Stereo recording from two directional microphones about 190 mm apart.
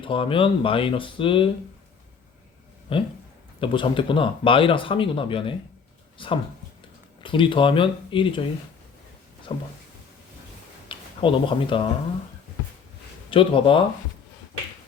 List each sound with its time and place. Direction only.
0.0 s speech: 30° left (ahead or behind)
2.9 s speech: 30° left (ahead or behind)
9.5 s speech: 30° left (ahead or behind)
10.8 s speech: 25° left (ahead or behind)
13.3 s speech: 25° left (ahead or behind)